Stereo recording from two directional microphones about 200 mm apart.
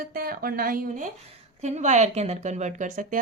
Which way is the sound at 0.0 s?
45° right (ahead or behind).